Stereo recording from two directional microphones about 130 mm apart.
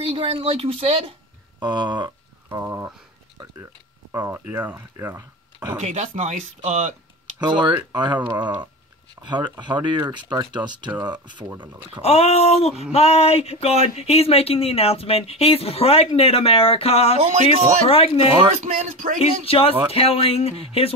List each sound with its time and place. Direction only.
0.0 s speech: 45° right (ahead or behind)
1.6 s a sound: 35° right (ahead or behind)
2.6 s speech: 20° right (ahead or behind)
3.4 s speech: 30° right (ahead or behind)
5.8 s speech: 50° right (ahead or behind)
7.3 s speech: 35° right (ahead or behind)
9.2 s speech: 35° right (ahead or behind)
12.0 s speech: 55° left (ahead or behind)
17.2 s speech: 55° right (ahead or behind)
17.8 s speech: 50° left (ahead or behind)
18.6 s speech: 80° right
19.4 s speech: 45° left (ahead or behind)